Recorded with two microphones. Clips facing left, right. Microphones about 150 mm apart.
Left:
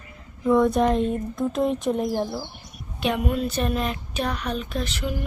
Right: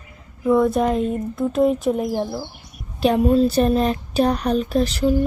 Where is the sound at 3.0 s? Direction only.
35° right (ahead or behind).